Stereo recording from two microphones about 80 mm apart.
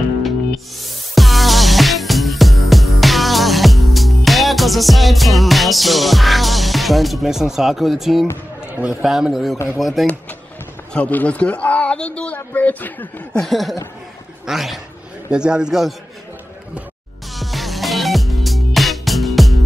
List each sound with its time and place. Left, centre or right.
0.8 s music: centre
8.8 s a man's voice: centre
10.9 s a man's voice: centre
13.3 s a man's voice: centre
17.4 s music: centre